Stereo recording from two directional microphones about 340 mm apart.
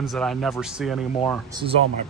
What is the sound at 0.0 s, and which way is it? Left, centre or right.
Speech, centre.